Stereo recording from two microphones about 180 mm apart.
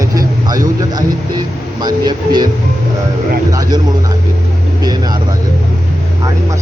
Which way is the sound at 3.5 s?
20° right (ahead or behind).